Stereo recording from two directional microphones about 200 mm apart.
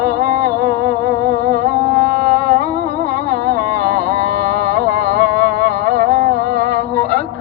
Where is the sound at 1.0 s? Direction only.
55° right (ahead or behind).